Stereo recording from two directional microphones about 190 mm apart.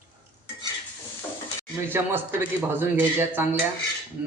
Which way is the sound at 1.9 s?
10° right (ahead or behind).